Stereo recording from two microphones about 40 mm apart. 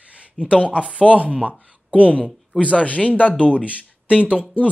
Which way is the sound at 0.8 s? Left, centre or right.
Right.